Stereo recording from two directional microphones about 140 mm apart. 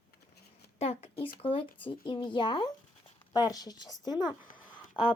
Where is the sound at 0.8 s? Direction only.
45° left (ahead or behind).